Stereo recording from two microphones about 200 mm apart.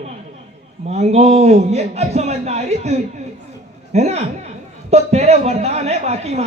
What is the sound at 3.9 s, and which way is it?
Speech, 35° right (ahead or behind).